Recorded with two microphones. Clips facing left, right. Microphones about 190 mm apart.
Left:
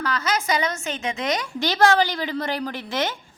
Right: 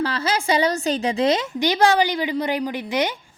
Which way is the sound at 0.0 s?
30° right (ahead or behind).